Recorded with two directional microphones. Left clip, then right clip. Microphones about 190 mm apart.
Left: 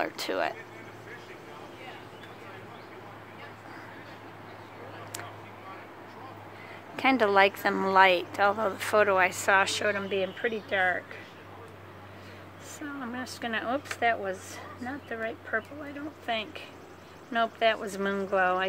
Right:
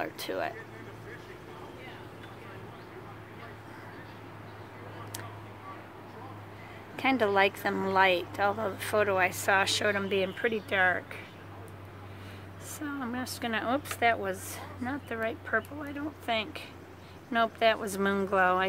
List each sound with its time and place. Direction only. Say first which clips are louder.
0.0 s a woman's voice: left 4 dB; 25° left (ahead or behind)
7.0 s a woman's voice: left 3 dB; 20° left (ahead or behind)
9.8 s speech: even; 10° right (ahead or behind)
12.7 s speech: right 1 dB; 10° right (ahead or behind)